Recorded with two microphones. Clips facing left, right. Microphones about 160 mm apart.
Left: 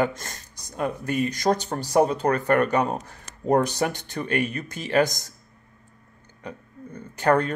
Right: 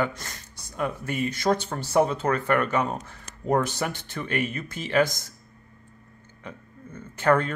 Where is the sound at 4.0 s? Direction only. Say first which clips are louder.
Left 3 dB; 40° left (ahead or behind).